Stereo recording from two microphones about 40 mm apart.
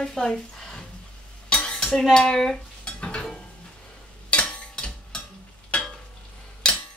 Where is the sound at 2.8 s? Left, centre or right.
Left.